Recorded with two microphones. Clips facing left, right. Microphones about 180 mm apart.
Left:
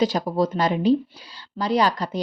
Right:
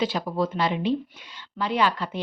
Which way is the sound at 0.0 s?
40° left (ahead or behind).